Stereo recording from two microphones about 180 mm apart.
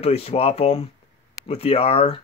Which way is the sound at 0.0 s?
35° left (ahead or behind).